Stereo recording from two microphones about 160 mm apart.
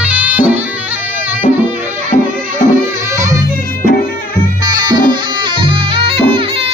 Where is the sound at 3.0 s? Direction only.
20° right (ahead or behind).